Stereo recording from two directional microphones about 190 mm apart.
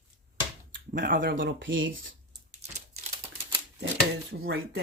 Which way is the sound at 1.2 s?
65° right (ahead or behind).